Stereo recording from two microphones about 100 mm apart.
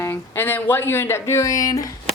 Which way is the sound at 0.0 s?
20° left (ahead or behind).